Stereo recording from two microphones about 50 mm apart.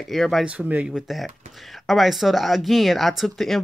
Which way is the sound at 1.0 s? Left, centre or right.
Centre.